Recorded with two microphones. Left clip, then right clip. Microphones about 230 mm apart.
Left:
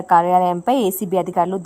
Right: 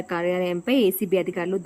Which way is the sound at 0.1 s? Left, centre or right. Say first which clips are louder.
Left 11 dB; left.